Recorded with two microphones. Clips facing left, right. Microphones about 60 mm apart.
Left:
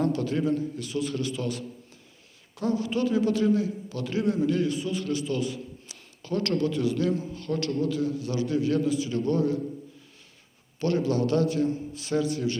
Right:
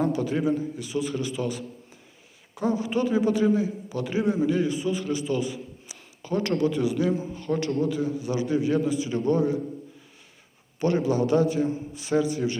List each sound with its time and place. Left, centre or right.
0.0 s a man's voice: centre
10.8 s a man's voice: centre